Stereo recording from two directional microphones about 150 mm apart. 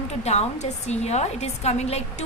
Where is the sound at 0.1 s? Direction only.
45° left (ahead or behind).